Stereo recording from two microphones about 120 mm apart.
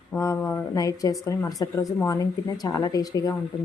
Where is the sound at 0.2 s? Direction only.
25° left (ahead or behind).